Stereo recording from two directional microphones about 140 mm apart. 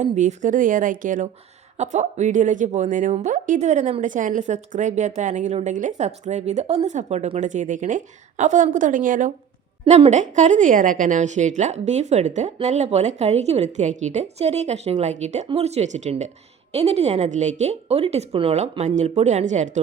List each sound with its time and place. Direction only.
0.0 s speech: 60° right (ahead or behind)
1.8 s speech: 55° right (ahead or behind)
9.8 s speech: 50° right (ahead or behind)